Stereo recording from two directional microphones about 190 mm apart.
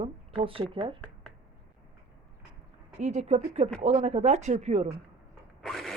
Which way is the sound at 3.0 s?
35° right (ahead or behind).